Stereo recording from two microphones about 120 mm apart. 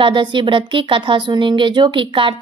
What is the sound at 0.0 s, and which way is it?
A woman's voice, 45° right (ahead or behind).